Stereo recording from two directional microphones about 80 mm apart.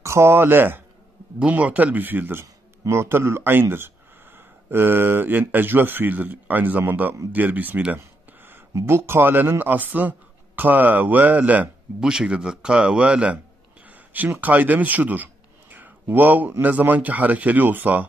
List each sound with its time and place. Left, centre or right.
0.0 s speech: right
7.3 s a sound: right
8.8 s speech: right
12.0 s speech: centre